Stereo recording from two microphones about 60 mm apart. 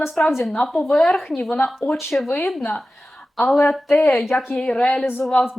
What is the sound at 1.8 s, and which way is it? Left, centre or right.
Speech, left.